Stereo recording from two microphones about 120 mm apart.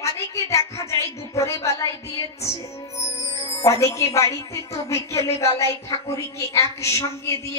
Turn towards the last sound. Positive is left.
turn(degrees=25)  # may be behind; listen again after turning